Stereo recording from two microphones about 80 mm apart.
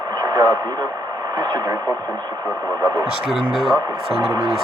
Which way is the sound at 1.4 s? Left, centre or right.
Right.